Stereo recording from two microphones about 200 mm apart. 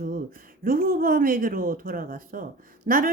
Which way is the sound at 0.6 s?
45° right (ahead or behind).